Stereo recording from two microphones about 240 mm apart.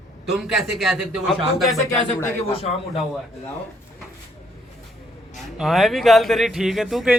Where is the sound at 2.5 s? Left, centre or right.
Left.